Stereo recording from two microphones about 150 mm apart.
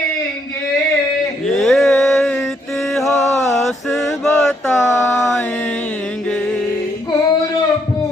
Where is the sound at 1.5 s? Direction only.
Centre (ahead or behind).